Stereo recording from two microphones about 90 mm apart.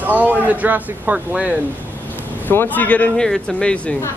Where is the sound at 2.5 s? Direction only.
20° left (ahead or behind).